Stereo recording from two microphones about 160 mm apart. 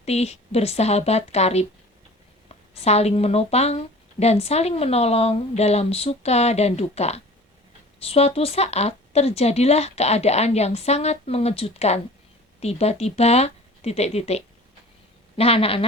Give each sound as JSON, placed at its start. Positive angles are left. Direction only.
{"t": 0.0, "sound": "speech", "side_deg": 40}
{"t": 2.8, "sound": "speech", "side_deg": 40}